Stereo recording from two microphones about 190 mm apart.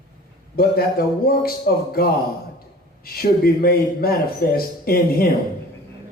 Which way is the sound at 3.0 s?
50° left (ahead or behind).